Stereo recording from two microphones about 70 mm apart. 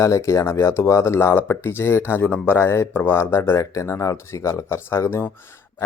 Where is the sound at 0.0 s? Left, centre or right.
Left.